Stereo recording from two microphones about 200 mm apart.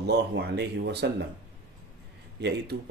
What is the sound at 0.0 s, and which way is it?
Speech, 55° right (ahead or behind).